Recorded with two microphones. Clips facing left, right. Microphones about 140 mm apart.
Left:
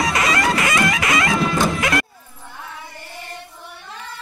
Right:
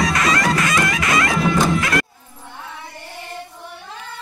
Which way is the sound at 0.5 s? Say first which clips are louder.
Even; 25° left (ahead or behind).